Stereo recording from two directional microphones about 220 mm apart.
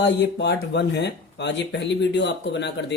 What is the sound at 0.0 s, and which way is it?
Speech, 50° left (ahead or behind).